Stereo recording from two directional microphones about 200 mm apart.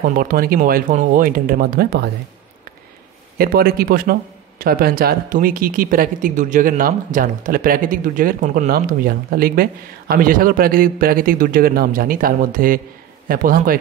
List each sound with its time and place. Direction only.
0.0 s speech: 45° right (ahead or behind)
3.3 s speech: 50° right (ahead or behind)